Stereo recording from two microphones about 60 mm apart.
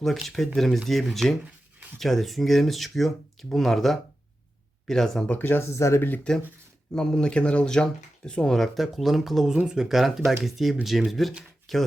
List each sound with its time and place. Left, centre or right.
0.0 s speech: centre
5.4 s speech: left
5.7 s speech: left
6.3 s speech: centre